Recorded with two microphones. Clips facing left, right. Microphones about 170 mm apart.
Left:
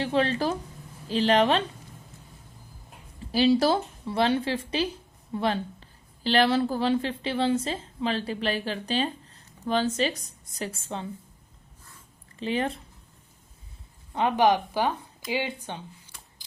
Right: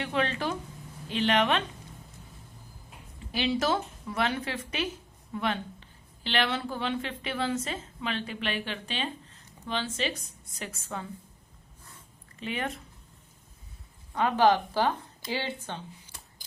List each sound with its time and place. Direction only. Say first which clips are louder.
0.0 s a woman's voice: left 5 dB; 35° left (ahead or behind)
3.3 s a woman's voice: left 6 dB; 35° left (ahead or behind)
10.6 s a woman's voice: left 4 dB; 30° left (ahead or behind)
12.4 s a woman's voice: left 6 dB; 30° left (ahead or behind)
14.1 s a woman's voice: left 1 dB; 20° left (ahead or behind)